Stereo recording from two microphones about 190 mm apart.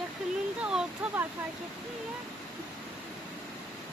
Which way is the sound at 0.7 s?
5° right (ahead or behind).